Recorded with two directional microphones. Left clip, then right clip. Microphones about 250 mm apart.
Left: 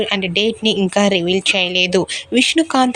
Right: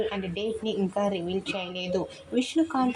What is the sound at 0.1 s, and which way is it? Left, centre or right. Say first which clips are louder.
Speech: left 14 dB; left.